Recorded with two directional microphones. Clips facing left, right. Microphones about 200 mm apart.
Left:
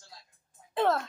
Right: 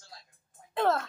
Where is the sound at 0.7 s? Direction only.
Centre (ahead or behind).